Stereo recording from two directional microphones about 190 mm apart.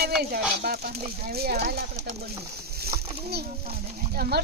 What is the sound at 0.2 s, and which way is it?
Speech, 55° right (ahead or behind).